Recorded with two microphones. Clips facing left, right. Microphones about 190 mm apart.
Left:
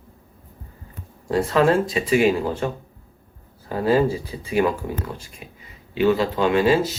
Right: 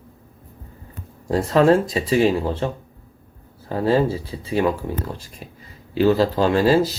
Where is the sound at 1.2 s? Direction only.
35° right (ahead or behind).